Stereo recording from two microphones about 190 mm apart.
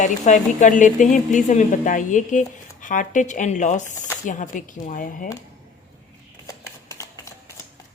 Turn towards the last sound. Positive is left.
turn(degrees=15)  # may be behind; listen again after turning